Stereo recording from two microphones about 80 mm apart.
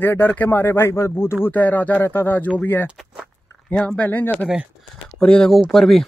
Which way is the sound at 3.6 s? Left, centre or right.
Centre.